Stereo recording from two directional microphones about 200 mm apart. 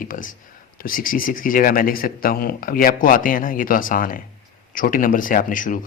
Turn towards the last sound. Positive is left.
turn(degrees=40)  # may be behind; listen again after turning